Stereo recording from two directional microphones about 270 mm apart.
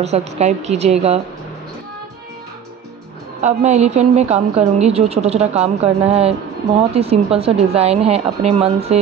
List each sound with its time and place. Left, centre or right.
0.0 s a woman's voice: right
3.3 s a woman's voice: right